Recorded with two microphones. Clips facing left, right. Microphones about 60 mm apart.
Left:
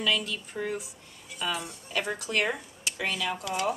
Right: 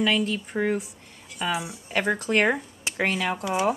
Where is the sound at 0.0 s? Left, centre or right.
Right.